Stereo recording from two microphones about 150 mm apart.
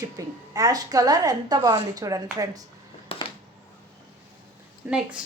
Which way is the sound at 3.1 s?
40° left (ahead or behind).